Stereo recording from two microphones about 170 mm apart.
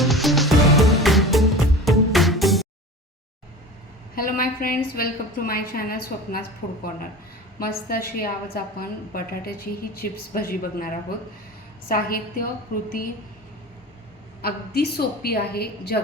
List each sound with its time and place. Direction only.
0.0 s music: centre (ahead or behind)
4.1 s a woman's voice: 55° left (ahead or behind)
7.6 s a woman's voice: 60° left (ahead or behind)
14.4 s a woman's voice: 70° left (ahead or behind)